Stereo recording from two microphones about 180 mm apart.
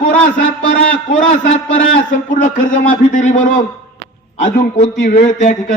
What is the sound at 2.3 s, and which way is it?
A man's voice, 45° left (ahead or behind).